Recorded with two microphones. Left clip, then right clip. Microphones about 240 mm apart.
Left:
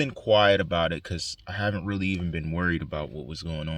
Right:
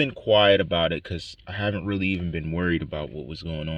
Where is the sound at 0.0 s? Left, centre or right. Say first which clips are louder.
Right 2 dB; left.